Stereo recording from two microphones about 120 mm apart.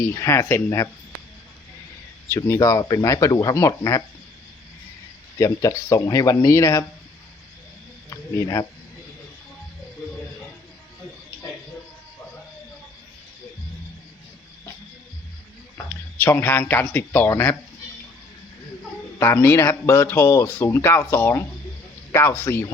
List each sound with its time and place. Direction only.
0.0 s speech: 25° left (ahead or behind)
2.3 s speech: 25° left (ahead or behind)
5.4 s speech: 25° left (ahead or behind)
8.1 s speech: 30° left (ahead or behind)
16.1 s speech: 20° left (ahead or behind)
19.2 s speech: 20° left (ahead or behind)